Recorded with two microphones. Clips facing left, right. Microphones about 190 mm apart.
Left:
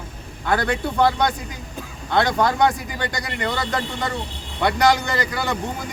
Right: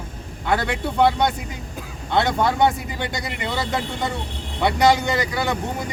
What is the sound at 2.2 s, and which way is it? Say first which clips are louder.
Speech: even; 5° right (ahead or behind).